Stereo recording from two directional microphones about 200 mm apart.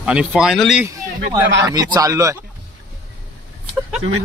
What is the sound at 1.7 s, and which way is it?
Speech, 20° right (ahead or behind).